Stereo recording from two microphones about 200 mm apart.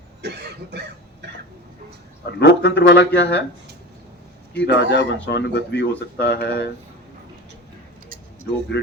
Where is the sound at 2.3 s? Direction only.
60° left (ahead or behind).